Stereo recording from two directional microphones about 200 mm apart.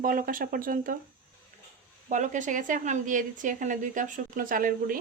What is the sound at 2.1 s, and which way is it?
A woman's voice, 40° right (ahead or behind).